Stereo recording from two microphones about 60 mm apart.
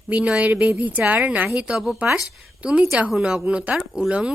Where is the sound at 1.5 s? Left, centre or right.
Centre.